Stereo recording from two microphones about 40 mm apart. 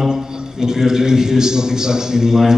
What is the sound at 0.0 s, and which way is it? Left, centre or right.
A man's voice, centre.